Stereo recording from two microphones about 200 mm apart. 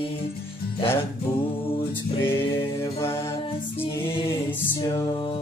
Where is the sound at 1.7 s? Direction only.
10° left (ahead or behind).